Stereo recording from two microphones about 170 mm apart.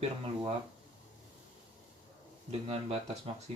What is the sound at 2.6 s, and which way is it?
Speech, 35° right (ahead or behind).